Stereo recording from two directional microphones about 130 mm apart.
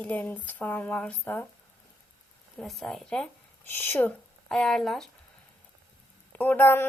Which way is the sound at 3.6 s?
15° left (ahead or behind).